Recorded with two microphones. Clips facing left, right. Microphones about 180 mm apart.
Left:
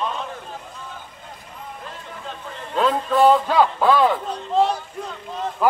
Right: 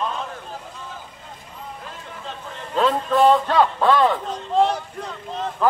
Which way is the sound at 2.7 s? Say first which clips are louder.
Even; centre (ahead or behind).